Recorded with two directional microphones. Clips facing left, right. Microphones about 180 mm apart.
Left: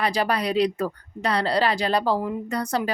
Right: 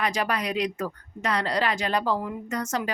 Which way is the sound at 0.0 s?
35° left (ahead or behind).